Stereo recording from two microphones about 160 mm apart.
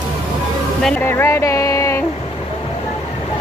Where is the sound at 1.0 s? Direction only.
15° left (ahead or behind).